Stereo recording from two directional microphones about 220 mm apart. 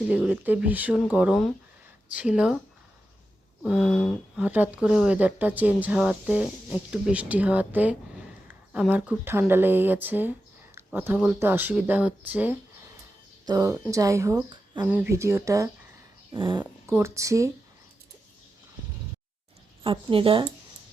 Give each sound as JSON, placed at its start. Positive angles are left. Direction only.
{"t": 0.1, "sound": "speech", "side_deg": -5}
{"t": 3.6, "sound": "speech", "side_deg": 0}
{"t": 19.8, "sound": "a woman's voice", "side_deg": -25}